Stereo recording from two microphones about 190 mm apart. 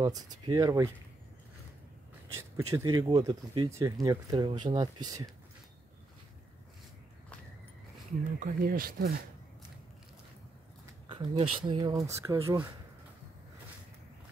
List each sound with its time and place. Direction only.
0.0 s speech: 20° right (ahead or behind)
2.3 s speech: 15° right (ahead or behind)
8.2 s speech: 45° right (ahead or behind)
11.1 s speech: 25° right (ahead or behind)